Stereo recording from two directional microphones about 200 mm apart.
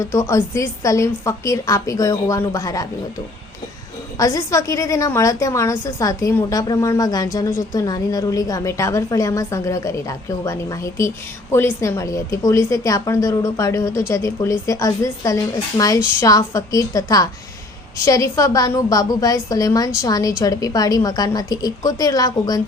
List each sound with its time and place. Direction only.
0.0 s a woman's voice: 15° left (ahead or behind)
4.2 s a woman's voice: 15° left (ahead or behind)